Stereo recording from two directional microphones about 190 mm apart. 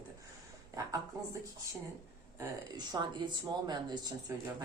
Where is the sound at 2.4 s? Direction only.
20° right (ahead or behind).